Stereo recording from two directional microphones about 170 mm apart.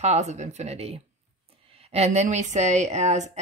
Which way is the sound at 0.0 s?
40° right (ahead or behind).